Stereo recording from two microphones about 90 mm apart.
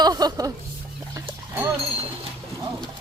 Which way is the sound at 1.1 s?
25° right (ahead or behind).